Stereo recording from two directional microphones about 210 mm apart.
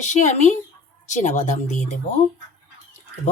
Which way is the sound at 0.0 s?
35° left (ahead or behind).